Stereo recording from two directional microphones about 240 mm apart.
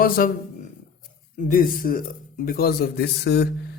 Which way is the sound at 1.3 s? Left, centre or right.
Left.